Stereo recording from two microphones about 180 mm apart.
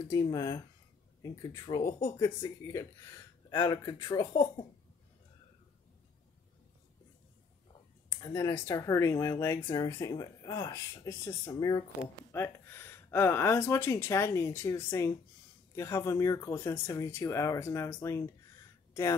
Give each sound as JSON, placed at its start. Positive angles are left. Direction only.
{"t": 0.1, "sound": "speech", "side_deg": 20}
{"t": 8.1, "sound": "speech", "side_deg": 15}